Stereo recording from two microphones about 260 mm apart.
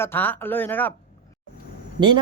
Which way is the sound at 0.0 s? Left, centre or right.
Centre.